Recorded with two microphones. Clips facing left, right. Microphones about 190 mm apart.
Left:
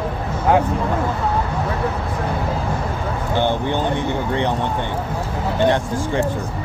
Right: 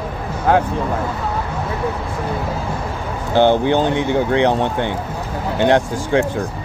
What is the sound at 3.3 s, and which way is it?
Speech, 90° right.